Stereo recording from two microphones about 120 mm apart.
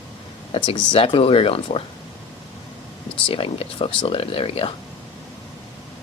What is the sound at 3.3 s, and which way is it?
Speech, 50° left (ahead or behind).